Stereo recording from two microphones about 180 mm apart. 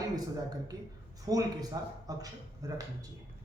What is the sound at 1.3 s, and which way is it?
A man's voice, 20° right (ahead or behind).